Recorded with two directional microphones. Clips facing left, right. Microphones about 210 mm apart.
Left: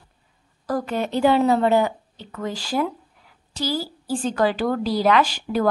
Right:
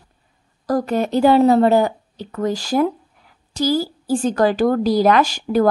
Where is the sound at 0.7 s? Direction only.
40° right (ahead or behind).